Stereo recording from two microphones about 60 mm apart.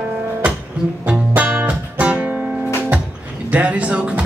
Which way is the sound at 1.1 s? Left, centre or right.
Right.